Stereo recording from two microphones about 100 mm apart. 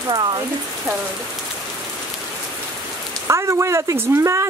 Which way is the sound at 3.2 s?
30° right (ahead or behind).